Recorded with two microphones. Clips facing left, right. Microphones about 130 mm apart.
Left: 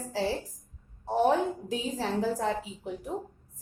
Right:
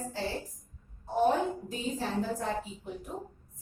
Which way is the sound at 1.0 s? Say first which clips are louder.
Left 2 dB; 90° left.